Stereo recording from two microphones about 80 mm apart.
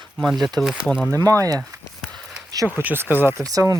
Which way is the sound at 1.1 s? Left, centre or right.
Right.